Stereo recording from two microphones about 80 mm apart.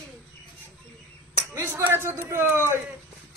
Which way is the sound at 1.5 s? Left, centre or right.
Right.